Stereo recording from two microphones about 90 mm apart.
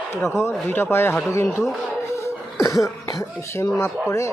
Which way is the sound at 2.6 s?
40° left (ahead or behind).